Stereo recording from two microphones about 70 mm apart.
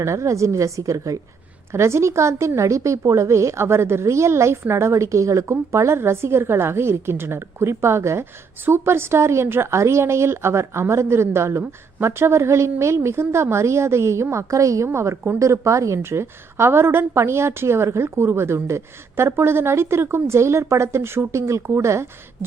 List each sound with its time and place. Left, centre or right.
0.0 s a woman's voice: right
1.7 s a woman's voice: right